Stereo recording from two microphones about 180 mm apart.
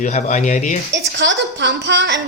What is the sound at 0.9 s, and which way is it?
A woman's voice, 75° right (ahead or behind).